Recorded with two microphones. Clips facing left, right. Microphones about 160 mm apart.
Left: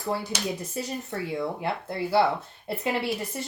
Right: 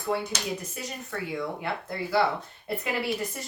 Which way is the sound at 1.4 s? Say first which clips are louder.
Left 2 dB; 30° left (ahead or behind).